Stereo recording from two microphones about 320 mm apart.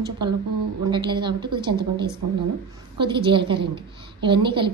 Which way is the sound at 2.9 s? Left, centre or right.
Centre.